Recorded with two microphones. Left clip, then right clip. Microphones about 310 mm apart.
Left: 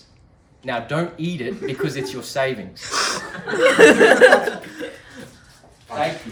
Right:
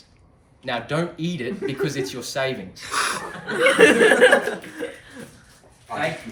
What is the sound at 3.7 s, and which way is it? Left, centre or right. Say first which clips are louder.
Speech: left 4 dB; left.